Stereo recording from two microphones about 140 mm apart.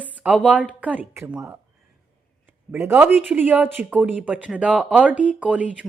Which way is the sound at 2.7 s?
15° right (ahead or behind).